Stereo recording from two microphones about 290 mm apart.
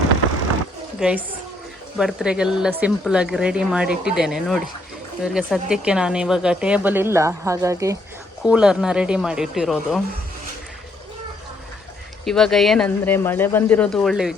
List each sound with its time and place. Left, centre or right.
0.9 s a woman's voice: centre
12.2 s speech: centre